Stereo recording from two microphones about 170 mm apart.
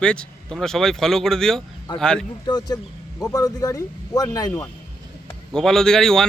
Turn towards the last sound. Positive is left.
turn(degrees=5)  # may be behind; listen again after turning